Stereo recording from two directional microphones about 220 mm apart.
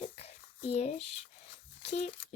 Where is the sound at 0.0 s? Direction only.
25° left (ahead or behind).